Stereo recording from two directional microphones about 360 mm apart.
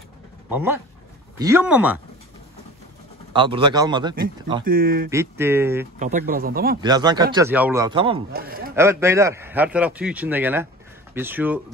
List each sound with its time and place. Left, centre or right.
0.5 s a man's voice: centre
3.3 s speech: centre
4.6 s speech: right
5.1 s speech: centre
5.9 s speech: right
6.8 s speech: centre
8.3 s a man's voice: right
8.7 s a man's voice: centre